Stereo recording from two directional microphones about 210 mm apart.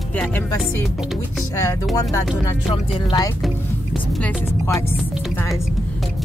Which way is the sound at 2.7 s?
25° left (ahead or behind).